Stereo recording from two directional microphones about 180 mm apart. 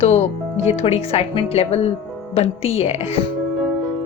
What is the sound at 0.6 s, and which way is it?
Speech, 35° left (ahead or behind).